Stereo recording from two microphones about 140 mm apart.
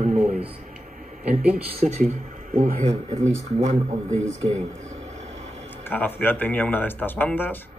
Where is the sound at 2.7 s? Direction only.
55° right (ahead or behind).